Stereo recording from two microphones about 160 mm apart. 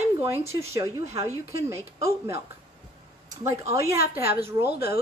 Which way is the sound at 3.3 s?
15° right (ahead or behind).